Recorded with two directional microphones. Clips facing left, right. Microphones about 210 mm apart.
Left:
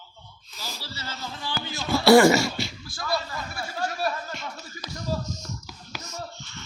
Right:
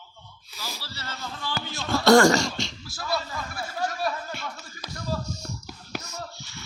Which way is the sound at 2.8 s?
5° right (ahead or behind).